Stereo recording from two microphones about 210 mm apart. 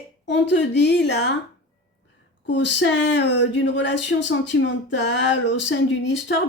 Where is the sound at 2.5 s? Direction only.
60° left (ahead or behind).